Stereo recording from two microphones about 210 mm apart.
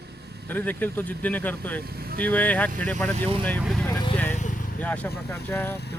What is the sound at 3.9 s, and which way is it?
Vehicle, 20° left (ahead or behind).